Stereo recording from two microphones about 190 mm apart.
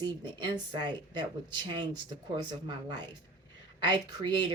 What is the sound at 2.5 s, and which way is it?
A woman's voice, 25° right (ahead or behind).